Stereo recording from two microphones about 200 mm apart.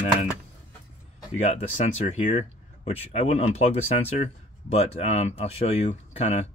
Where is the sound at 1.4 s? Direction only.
35° left (ahead or behind).